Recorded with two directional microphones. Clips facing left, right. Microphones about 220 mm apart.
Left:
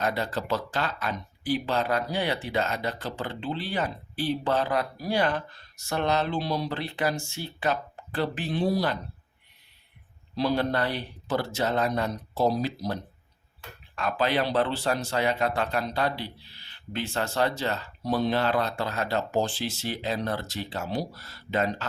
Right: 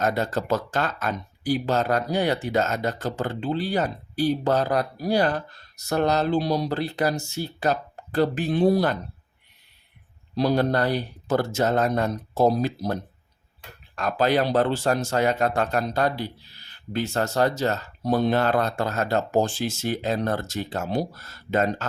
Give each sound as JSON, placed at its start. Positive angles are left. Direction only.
{"t": 0.0, "sound": "speech", "side_deg": -45}
{"t": 10.3, "sound": "speech", "side_deg": -45}